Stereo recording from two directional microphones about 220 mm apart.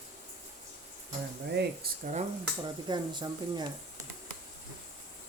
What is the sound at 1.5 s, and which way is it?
Speech, 40° right (ahead or behind).